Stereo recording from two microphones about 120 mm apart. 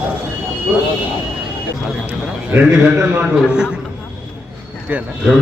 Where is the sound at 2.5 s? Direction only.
15° right (ahead or behind).